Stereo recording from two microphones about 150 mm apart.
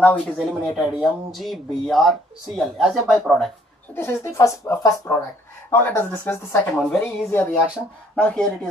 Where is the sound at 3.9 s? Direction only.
20° left (ahead or behind).